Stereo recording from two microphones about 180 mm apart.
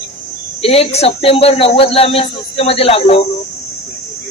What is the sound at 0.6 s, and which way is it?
A man's voice, 35° left (ahead or behind).